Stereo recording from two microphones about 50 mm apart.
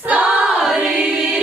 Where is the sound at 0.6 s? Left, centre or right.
Centre.